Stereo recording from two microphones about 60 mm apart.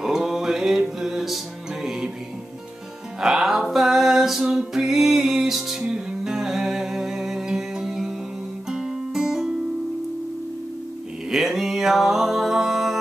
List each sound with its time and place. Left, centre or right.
0.0 s music: centre
3.2 s music: centre
11.2 s music: centre